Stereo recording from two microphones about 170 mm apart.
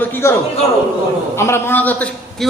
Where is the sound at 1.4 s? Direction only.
15° left (ahead or behind).